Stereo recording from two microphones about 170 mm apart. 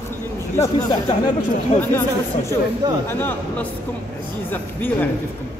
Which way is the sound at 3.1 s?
10° left (ahead or behind).